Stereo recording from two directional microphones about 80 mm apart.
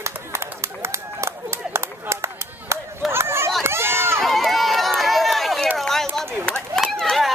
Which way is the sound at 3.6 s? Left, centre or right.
Right.